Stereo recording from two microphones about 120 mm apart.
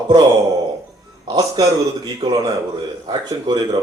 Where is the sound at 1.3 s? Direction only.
30° right (ahead or behind).